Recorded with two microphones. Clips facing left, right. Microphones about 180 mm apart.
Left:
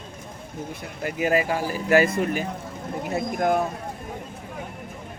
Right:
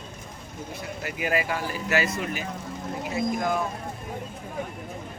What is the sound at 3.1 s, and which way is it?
Speech, 55° left (ahead or behind).